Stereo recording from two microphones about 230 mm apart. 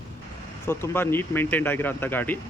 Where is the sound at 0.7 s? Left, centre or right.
Centre.